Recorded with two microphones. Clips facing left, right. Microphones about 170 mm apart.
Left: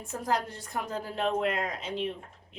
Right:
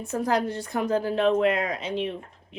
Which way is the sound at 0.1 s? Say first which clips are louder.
Right 6 dB; 80° right.